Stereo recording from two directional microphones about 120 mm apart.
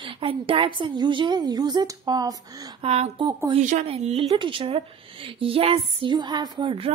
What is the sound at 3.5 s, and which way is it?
Speech, 90° right.